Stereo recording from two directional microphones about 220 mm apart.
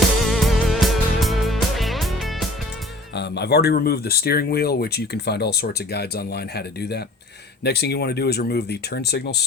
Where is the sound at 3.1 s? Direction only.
50° left (ahead or behind).